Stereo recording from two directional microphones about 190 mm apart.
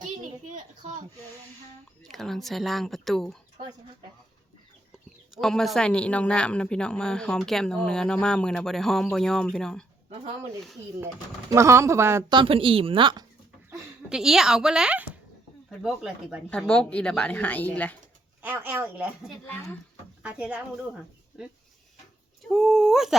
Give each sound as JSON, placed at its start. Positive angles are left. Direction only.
{"t": 0.0, "sound": "a sound", "side_deg": -40}
{"t": 2.0, "sound": "speech", "side_deg": 0}
{"t": 5.3, "sound": "speech", "side_deg": 0}
{"t": 10.1, "sound": "speech", "side_deg": -30}
{"t": 11.0, "sound": "speech", "side_deg": -15}
{"t": 12.4, "sound": "a woman's voice", "side_deg": -30}
{"t": 13.7, "sound": "speech", "side_deg": -5}
{"t": 18.4, "sound": "speech", "side_deg": -10}
{"t": 19.5, "sound": "speech", "side_deg": 10}
{"t": 20.2, "sound": "speech", "side_deg": -5}
{"t": 22.4, "sound": "speech", "side_deg": 0}